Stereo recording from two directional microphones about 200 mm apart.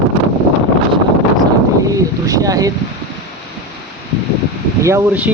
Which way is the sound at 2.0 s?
15° right (ahead or behind).